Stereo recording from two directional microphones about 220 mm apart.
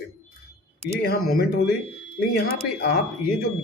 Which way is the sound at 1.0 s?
45° left (ahead or behind).